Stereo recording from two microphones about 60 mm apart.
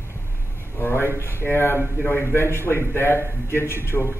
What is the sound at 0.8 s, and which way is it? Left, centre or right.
A man's voice, left.